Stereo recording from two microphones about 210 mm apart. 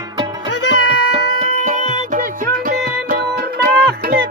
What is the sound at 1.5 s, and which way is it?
Music, 35° right (ahead or behind).